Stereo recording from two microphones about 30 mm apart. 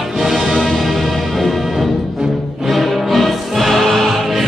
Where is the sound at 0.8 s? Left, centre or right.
Centre.